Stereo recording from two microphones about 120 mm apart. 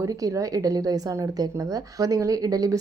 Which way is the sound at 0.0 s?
30° right (ahead or behind).